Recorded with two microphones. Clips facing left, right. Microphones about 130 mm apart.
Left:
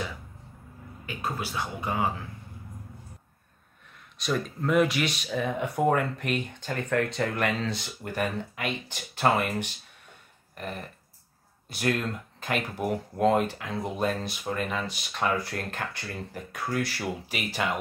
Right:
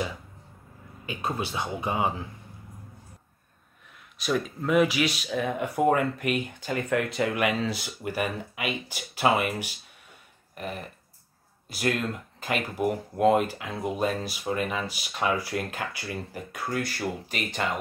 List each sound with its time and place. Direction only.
1.0 s speech: 20° right (ahead or behind)
4.2 s speech: 5° right (ahead or behind)